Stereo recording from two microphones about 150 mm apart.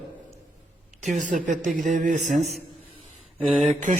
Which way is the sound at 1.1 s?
55° right (ahead or behind).